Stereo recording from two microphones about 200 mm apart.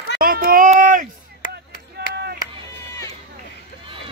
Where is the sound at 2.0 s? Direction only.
55° right (ahead or behind).